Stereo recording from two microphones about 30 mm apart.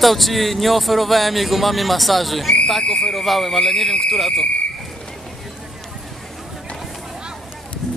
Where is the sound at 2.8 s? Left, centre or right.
Left.